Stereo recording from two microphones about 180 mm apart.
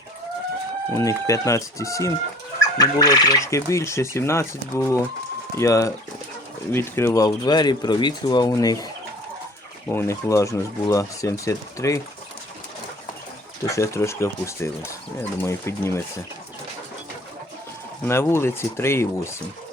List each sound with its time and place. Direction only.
0.9 s speech: 20° left (ahead or behind)
9.9 s speech: 15° left (ahead or behind)
13.7 s speech: 15° left (ahead or behind)
18.0 s speech: 15° left (ahead or behind)